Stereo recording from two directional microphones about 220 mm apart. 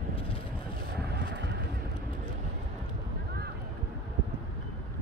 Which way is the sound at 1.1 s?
50° right (ahead or behind).